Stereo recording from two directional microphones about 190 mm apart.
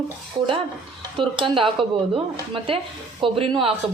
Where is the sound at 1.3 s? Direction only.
25° right (ahead or behind).